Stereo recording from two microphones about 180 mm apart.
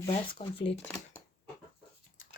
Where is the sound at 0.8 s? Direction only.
15° left (ahead or behind).